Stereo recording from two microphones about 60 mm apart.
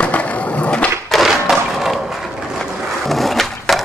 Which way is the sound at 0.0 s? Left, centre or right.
Left.